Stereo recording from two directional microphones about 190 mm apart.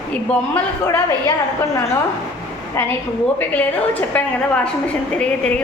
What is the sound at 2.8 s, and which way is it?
A woman's voice, 10° left (ahead or behind).